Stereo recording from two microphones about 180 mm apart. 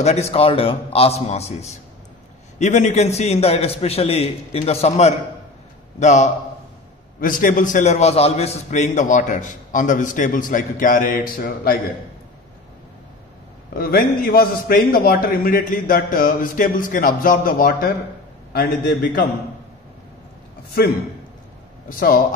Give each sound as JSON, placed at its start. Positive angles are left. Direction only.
{"t": 0.0, "sound": "a man's voice", "side_deg": 35}
{"t": 13.7, "sound": "a man's voice", "side_deg": 55}
{"t": 21.8, "sound": "a man's voice", "side_deg": 50}